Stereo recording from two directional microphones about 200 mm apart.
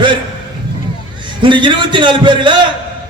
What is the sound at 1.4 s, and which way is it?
A man's voice, 25° right (ahead or behind).